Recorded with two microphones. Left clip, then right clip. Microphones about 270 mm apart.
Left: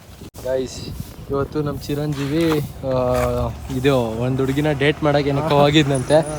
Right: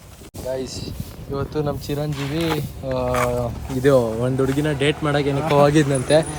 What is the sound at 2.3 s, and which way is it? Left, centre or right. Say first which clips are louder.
Speech: left 5 dB; centre.